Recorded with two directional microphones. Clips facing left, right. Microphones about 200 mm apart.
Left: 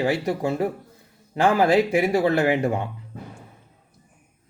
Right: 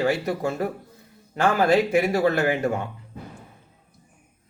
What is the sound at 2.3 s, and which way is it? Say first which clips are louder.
Speech: left 2 dB; 30° left (ahead or behind).